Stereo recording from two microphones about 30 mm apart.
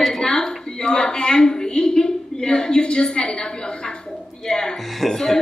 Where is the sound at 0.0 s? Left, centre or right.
Centre; by 3.9 s left.